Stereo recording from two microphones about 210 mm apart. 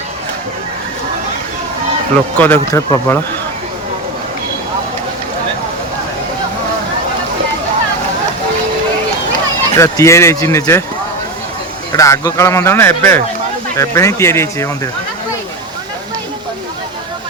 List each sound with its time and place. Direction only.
2.4 s speech: 5° left (ahead or behind)
9.7 s speech: 15° left (ahead or behind)
11.9 s speech: 15° left (ahead or behind)